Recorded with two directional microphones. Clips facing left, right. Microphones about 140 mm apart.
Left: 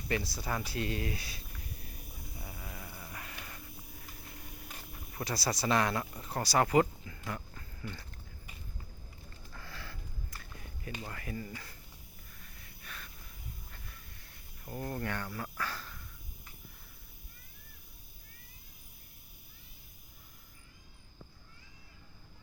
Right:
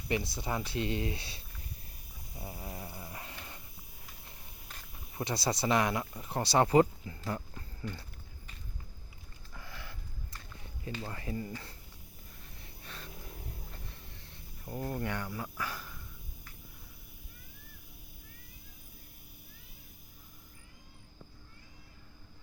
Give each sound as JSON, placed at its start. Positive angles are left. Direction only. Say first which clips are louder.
{"t": 0.1, "sound": "speech", "louder": "right 1 dB", "side_deg": -20}
{"t": 2.4, "sound": "a sound", "louder": "right 5 dB", "side_deg": -35}
{"t": 2.6, "sound": "speech", "louder": "right 4 dB", "side_deg": -20}
{"t": 3.0, "sound": "a sound", "louder": "right 1 dB", "side_deg": -25}
{"t": 5.1, "sound": "speech", "louder": "right 2 dB", "side_deg": -25}
{"t": 9.5, "sound": "sniff", "louder": "even", "side_deg": -15}
{"t": 11.1, "sound": "speech", "louder": "right 3 dB", "side_deg": -25}
{"t": 12.6, "sound": "a sound", "louder": "right 2 dB", "side_deg": -30}
{"t": 14.6, "sound": "speech", "louder": "right 1 dB", "side_deg": -10}